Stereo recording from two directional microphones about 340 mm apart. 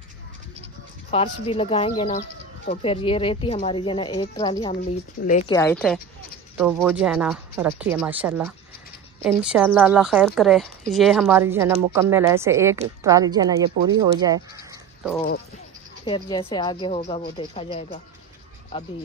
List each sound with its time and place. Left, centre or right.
1.1 s a woman's voice: centre
5.5 s a woman's voice: centre
14.2 s a sound: centre
16.1 s a woman's voice: centre